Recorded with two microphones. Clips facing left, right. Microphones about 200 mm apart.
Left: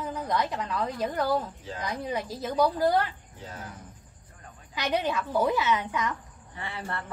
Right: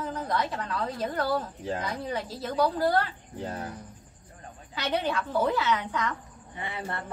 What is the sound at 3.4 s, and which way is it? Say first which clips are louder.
Speech: right 7 dB; 60° right (ahead or behind).